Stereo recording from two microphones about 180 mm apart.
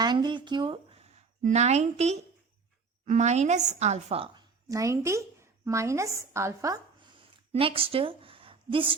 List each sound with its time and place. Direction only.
0.0 s speech: 25° right (ahead or behind)
1.4 s a woman's voice: 40° right (ahead or behind)
4.7 s a woman's voice: 15° right (ahead or behind)
7.5 s a woman's voice: 30° right (ahead or behind)